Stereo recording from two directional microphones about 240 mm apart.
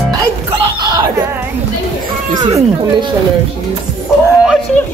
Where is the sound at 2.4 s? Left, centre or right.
Centre.